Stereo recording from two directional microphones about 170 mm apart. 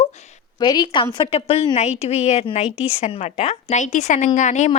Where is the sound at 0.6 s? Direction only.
25° left (ahead or behind).